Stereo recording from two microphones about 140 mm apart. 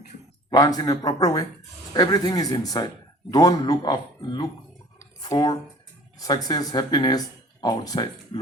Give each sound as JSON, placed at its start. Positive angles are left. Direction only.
{"t": 0.5, "sound": "speech", "side_deg": 25}